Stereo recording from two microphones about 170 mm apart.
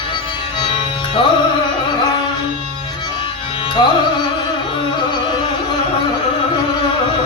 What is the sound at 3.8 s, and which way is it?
Music, 25° left (ahead or behind).